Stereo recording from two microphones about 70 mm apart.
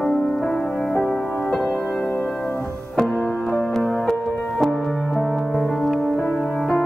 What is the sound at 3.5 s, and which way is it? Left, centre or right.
Music, centre.